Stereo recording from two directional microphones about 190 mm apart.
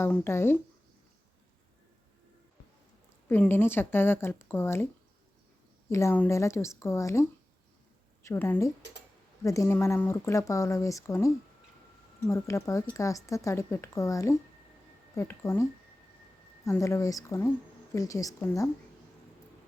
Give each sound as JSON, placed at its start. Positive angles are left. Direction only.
{"t": 0.0, "sound": "speech", "side_deg": 10}
{"t": 3.2, "sound": "speech", "side_deg": 10}
{"t": 5.9, "sound": "speech", "side_deg": 15}
{"t": 12.3, "sound": "speech", "side_deg": 15}
{"t": 16.6, "sound": "speech", "side_deg": 15}